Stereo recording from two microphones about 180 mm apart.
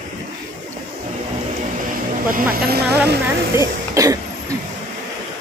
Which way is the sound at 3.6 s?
20° right (ahead or behind).